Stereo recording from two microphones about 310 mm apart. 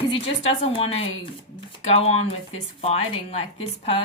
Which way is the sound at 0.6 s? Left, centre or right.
Centre.